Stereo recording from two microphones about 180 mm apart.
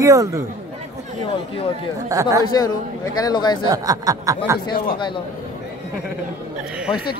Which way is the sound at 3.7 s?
20° right (ahead or behind).